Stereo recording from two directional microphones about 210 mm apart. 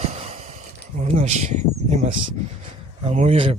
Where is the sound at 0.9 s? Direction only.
30° right (ahead or behind).